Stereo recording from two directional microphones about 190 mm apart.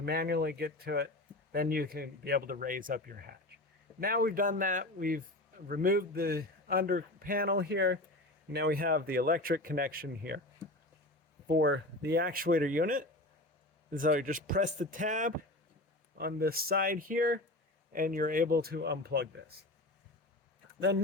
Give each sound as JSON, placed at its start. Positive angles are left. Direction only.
{"t": 0.0, "sound": "a man's voice", "side_deg": -55}
{"t": 11.4, "sound": "a man's voice", "side_deg": -70}
{"t": 16.1, "sound": "a man's voice", "side_deg": -55}